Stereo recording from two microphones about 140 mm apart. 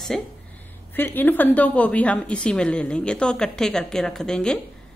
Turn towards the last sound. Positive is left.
turn(degrees=5)  # may be behind; listen again after turning